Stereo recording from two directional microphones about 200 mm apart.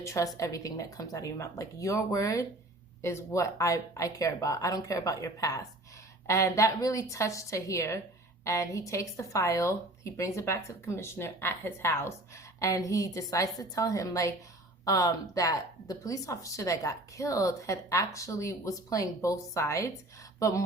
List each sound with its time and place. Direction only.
0.0 s a woman's voice: 15° left (ahead or behind)